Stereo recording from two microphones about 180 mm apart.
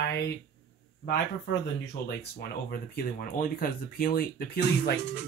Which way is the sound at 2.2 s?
60° left (ahead or behind).